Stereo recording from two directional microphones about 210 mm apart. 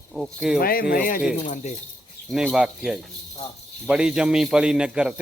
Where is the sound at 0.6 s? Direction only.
45° left (ahead or behind).